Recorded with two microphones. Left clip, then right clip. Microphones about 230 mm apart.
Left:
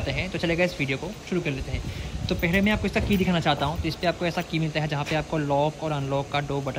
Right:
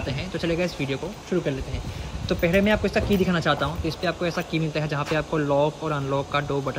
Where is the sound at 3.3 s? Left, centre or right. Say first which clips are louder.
Right 1 dB; centre.